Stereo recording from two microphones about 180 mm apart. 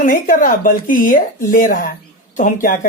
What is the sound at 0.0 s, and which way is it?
A woman's voice, 50° left (ahead or behind).